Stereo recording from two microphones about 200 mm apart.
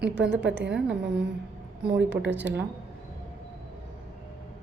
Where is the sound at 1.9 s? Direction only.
60° right (ahead or behind).